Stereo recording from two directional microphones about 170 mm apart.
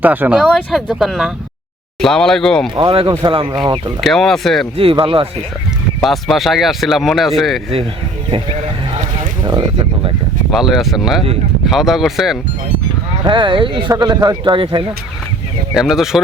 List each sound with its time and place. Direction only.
0.0 s speech: 10° right (ahead or behind)
0.3 s speech: centre (ahead or behind)
2.7 s speech: 30° right (ahead or behind)
4.0 s speech: centre (ahead or behind)
4.9 s speech: 30° right (ahead or behind)
6.0 s speech: centre (ahead or behind)
9.4 s a sound: 25° right (ahead or behind)
10.5 s speech: centre (ahead or behind)
13.2 s speech: 30° right (ahead or behind)
15.7 s speech: centre (ahead or behind)